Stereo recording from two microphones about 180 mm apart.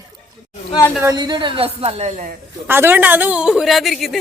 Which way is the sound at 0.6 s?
20° left (ahead or behind).